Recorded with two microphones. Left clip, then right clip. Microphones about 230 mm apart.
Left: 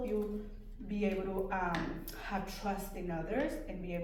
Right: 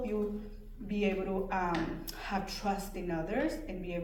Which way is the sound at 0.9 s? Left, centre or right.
Right.